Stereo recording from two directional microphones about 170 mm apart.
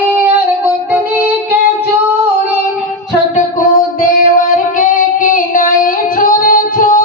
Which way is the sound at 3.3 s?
55° left (ahead or behind).